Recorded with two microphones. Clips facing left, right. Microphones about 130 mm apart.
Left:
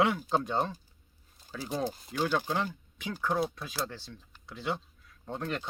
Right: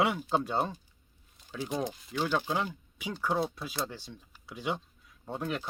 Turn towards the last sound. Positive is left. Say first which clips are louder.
# right 1 dB
turn(degrees=-10)  # may be behind; listen again after turning